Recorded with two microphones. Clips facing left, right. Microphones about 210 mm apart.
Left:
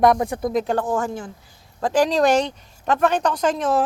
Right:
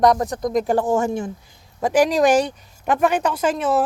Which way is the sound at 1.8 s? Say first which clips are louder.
Right 2 dB; 10° right (ahead or behind).